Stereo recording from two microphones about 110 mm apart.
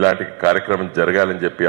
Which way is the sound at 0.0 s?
25° right (ahead or behind).